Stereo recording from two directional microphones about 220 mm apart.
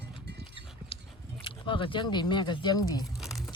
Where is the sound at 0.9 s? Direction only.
25° left (ahead or behind).